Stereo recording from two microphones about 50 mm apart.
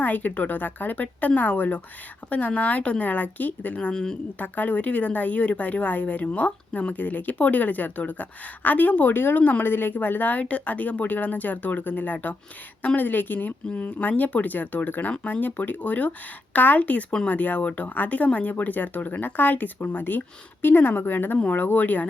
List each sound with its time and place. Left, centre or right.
0.0 s a woman's voice: left
3.9 s speech: centre
4.4 s a woman's voice: left